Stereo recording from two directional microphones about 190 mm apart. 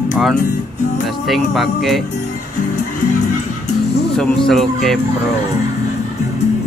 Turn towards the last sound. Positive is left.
turn(degrees=0)  # may be behind; listen again after turning